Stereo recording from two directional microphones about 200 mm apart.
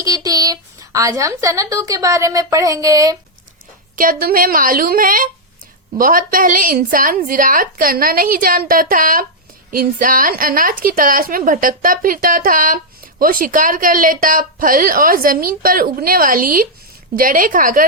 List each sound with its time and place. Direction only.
0.0 s a woman's voice: 15° right (ahead or behind)
3.9 s a woman's voice: 45° right (ahead or behind)